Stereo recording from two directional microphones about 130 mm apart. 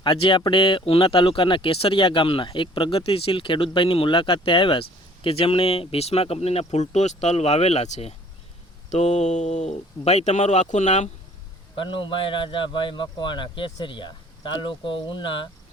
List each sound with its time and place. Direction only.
0.0 s speech: 40° left (ahead or behind); by 11.1 s 65° left (ahead or behind)
11.8 s speech: 40° left (ahead or behind)